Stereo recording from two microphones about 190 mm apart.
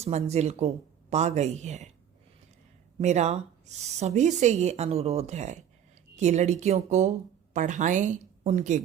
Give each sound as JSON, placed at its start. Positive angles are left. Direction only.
{"t": 0.0, "sound": "a woman's voice", "side_deg": -35}
{"t": 3.0, "sound": "a woman's voice", "side_deg": -35}